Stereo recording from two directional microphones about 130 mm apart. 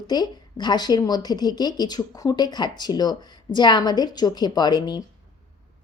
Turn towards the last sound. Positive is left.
turn(degrees=35)  # may be behind; listen again after turning